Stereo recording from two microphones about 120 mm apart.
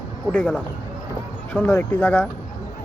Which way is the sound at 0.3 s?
15° left (ahead or behind).